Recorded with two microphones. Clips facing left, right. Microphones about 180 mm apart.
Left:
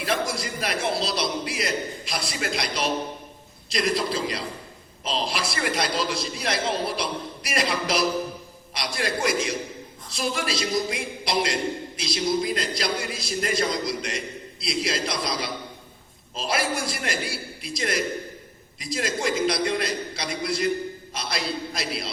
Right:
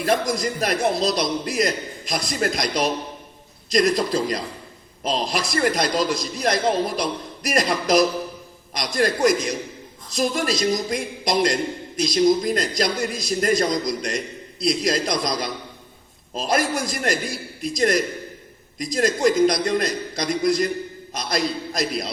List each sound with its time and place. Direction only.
0.0 s a man's voice: 45° right (ahead or behind)